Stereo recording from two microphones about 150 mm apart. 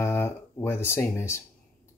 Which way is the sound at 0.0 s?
15° left (ahead or behind).